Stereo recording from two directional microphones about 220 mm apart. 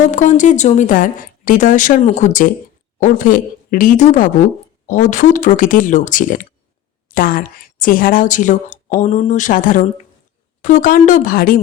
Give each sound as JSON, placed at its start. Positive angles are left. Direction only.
{"t": 0.0, "sound": "a woman's voice", "side_deg": 35}